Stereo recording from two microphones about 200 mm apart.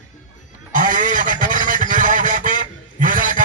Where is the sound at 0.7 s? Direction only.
40° right (ahead or behind).